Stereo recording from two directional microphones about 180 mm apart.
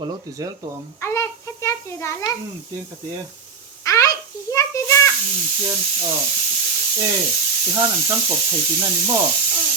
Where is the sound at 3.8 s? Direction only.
20° left (ahead or behind).